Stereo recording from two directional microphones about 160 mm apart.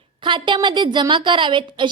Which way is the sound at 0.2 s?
30° right (ahead or behind).